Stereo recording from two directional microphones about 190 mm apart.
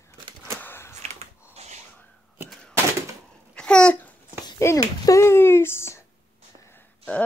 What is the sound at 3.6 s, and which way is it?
Babbling, 5° left (ahead or behind).